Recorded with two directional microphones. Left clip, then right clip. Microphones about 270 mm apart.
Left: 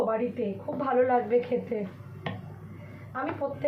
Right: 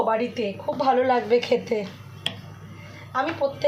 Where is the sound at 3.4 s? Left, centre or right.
Right.